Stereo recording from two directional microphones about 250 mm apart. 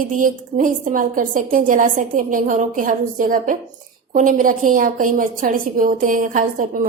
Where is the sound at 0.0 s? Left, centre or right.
Right.